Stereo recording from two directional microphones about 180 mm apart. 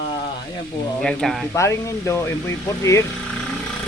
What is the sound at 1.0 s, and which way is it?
Speech, centre (ahead or behind).